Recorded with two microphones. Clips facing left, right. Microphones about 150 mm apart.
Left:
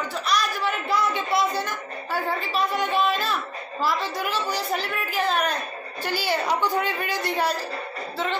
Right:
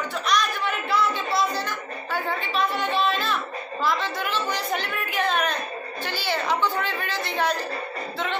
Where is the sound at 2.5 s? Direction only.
45° left (ahead or behind).